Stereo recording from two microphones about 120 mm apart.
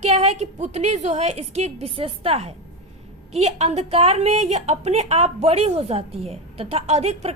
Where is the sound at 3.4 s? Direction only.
65° right (ahead or behind).